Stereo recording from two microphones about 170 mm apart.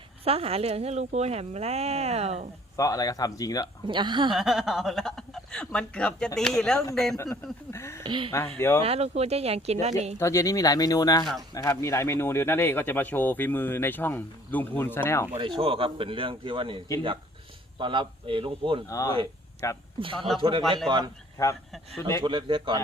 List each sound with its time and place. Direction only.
0.3 s a woman's voice: 35° right (ahead or behind)
2.7 s speech: 20° left (ahead or behind)
3.8 s a man's voice: 30° right (ahead or behind)
4.3 s speech: centre (ahead or behind)
7.7 s speech: 15° left (ahead or behind)
8.0 s speech: 30° right (ahead or behind)
8.5 s speech: 15° left (ahead or behind)
8.8 s a woman's voice: 35° right (ahead or behind)
10.2 s speech: 15° left (ahead or behind)
15.4 s a woman's voice: 30° right (ahead or behind)
18.9 s speech: 20° left (ahead or behind)
20.0 s a woman's voice: 30° right (ahead or behind)
21.4 s speech: 20° left (ahead or behind)
22.2 s a man's voice: 30° right (ahead or behind)